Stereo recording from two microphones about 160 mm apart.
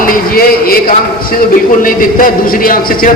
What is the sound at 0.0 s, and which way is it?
A man's voice, 65° left (ahead or behind).